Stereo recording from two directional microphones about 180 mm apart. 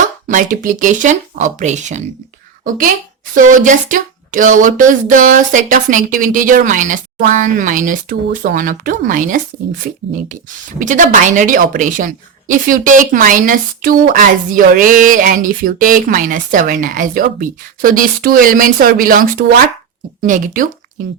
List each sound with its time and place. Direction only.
0.3 s speech: 45° right (ahead or behind)
10.8 s speech: 45° right (ahead or behind)